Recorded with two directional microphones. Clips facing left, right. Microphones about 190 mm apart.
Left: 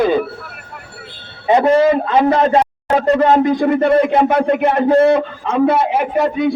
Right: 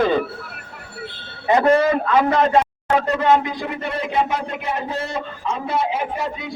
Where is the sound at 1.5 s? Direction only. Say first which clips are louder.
Left 4 dB; 25° left (ahead or behind).